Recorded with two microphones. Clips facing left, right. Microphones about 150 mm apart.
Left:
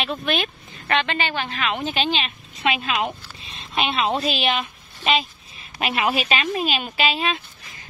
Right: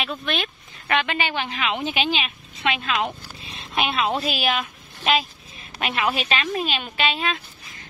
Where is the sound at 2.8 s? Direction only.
10° left (ahead or behind).